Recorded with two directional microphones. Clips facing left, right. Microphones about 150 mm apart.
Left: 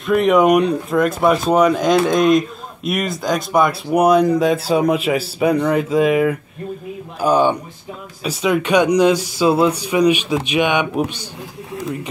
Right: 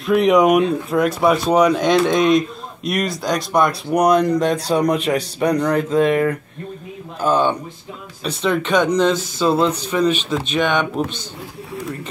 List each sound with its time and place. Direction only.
0.0 s speech: centre (ahead or behind)